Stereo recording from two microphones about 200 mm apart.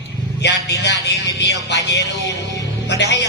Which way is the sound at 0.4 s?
60° left (ahead or behind).